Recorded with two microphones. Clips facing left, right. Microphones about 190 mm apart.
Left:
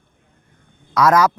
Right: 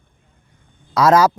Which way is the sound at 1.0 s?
30° right (ahead or behind).